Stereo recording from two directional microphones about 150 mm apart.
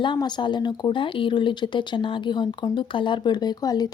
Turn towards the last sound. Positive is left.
turn(degrees=25)  # may be behind; listen again after turning